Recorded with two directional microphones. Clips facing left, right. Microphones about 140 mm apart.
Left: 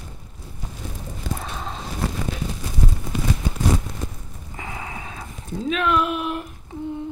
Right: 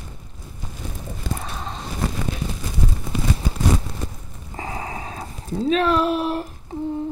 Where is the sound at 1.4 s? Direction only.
Centre (ahead or behind).